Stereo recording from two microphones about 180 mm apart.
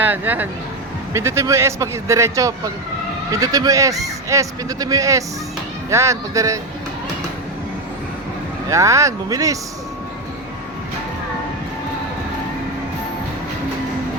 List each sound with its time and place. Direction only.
0.0 s a man's voice: 10° right (ahead or behind)
8.7 s a man's voice: 15° right (ahead or behind)